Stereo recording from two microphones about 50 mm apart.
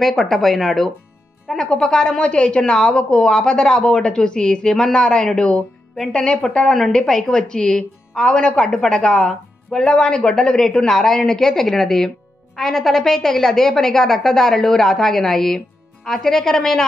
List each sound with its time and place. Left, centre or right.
0.0 s a woman's voice: centre